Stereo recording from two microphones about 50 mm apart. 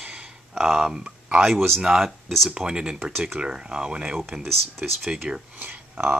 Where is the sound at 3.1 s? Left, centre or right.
Centre.